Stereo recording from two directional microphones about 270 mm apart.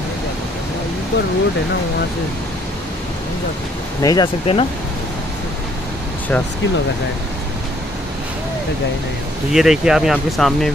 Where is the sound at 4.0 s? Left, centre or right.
Centre.